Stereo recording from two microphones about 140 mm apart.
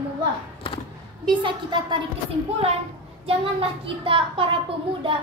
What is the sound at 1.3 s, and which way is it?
Speech, 35° right (ahead or behind).